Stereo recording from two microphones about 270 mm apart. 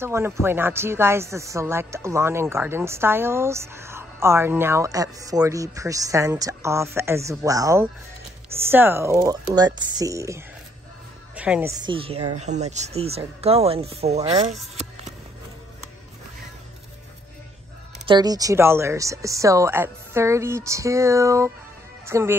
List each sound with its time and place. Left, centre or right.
0.0 s a woman's voice: centre
11.8 s speech: centre
18.0 s speech: centre
22.0 s music: centre